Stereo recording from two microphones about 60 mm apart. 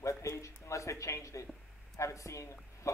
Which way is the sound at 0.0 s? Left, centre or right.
Left.